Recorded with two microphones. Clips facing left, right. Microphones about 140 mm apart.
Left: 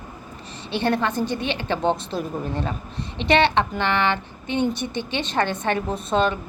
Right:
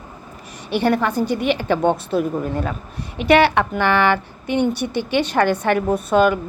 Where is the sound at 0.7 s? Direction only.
10° right (ahead or behind).